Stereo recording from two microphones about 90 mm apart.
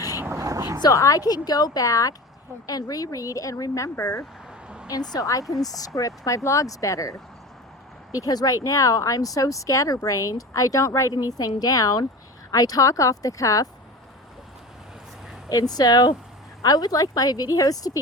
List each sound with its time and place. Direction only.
0.2 s a sound: 30° right (ahead or behind)
0.8 s a woman's voice: 40° left (ahead or behind)
15.4 s a woman's voice: 45° left (ahead or behind)